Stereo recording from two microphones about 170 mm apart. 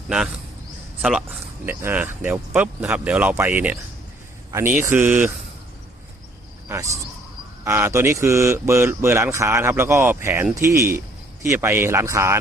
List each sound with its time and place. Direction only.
1.6 s speech: 10° right (ahead or behind)
6.7 s speech: 15° right (ahead or behind)